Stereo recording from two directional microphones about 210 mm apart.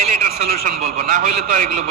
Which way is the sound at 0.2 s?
40° right (ahead or behind).